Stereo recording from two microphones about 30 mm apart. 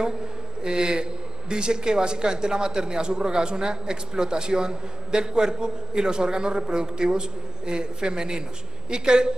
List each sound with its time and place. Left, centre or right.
0.7 s a man's voice: right